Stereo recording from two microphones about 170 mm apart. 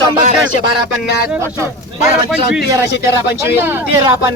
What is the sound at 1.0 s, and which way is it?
Speech, 75° left (ahead or behind).